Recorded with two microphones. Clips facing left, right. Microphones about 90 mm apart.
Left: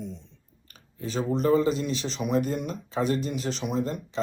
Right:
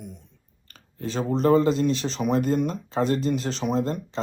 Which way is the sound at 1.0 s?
35° right (ahead or behind).